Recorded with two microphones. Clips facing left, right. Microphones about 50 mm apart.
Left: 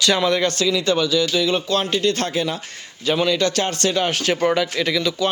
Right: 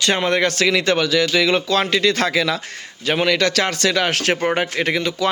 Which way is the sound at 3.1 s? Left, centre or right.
Right.